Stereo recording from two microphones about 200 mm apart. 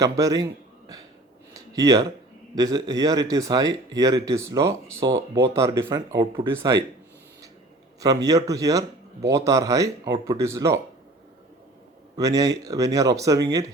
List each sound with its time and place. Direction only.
0.0 s speech: 15° right (ahead or behind)
1.5 s a sound: 15° right (ahead or behind)
2.6 s speech: 20° right (ahead or behind)
8.0 s speech: 20° right (ahead or behind)
12.1 s speech: 20° right (ahead or behind)